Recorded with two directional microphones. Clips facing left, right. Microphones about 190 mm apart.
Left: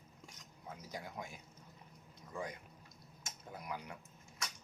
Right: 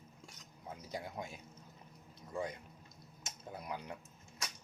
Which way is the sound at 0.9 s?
20° right (ahead or behind).